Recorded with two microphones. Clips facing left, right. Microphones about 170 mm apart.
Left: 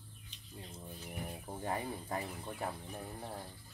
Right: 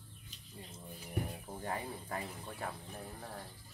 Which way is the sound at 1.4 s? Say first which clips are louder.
Left 2 dB; 20° left (ahead or behind).